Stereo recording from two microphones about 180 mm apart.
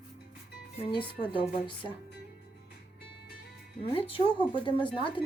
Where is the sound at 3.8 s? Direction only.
30° left (ahead or behind).